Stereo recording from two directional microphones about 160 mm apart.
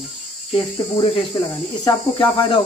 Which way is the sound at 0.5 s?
30° left (ahead or behind).